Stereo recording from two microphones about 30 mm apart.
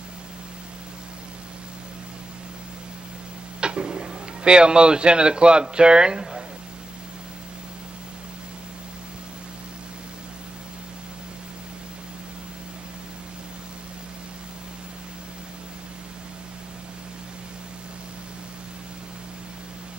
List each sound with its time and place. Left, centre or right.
3.6 s speech: right